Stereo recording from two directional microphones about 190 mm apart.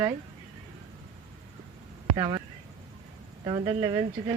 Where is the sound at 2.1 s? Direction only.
25° right (ahead or behind).